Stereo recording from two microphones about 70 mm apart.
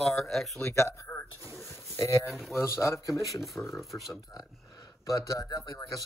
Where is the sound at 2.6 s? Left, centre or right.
Left.